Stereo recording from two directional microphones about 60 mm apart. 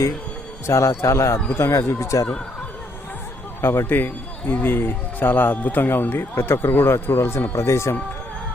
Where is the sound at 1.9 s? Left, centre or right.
Left.